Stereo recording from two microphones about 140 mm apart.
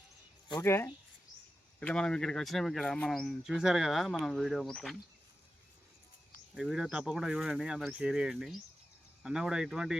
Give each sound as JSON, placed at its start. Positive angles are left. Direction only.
{"t": 0.6, "sound": "speech", "side_deg": 20}
{"t": 1.8, "sound": "speech", "side_deg": 5}
{"t": 6.5, "sound": "speech", "side_deg": -5}